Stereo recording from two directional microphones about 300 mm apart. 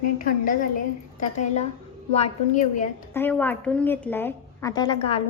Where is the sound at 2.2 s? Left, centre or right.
Left.